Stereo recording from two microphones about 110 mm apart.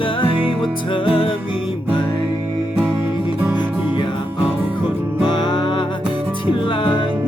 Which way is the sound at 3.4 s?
15° right (ahead or behind).